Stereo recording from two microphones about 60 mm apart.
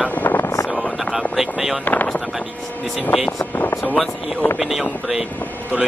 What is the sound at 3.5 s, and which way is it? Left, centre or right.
Vehicle, left.